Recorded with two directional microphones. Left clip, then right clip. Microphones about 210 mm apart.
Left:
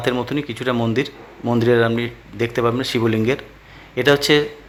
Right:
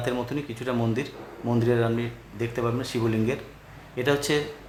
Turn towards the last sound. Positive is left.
turn(degrees=25)  # may be behind; listen again after turning